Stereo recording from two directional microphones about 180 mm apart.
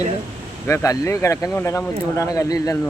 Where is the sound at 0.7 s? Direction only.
15° left (ahead or behind).